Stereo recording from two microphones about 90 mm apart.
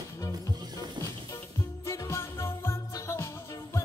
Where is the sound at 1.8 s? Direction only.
30° left (ahead or behind).